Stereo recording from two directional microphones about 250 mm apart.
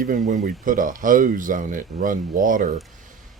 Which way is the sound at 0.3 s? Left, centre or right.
Right.